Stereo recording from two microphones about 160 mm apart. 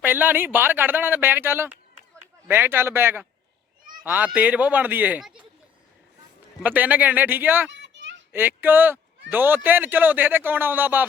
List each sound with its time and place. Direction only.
0.0 s a man's voice: 10° right (ahead or behind)
6.6 s a man's voice: 10° right (ahead or behind)
7.9 s a sound: 90° right
8.3 s a man's voice: 10° right (ahead or behind)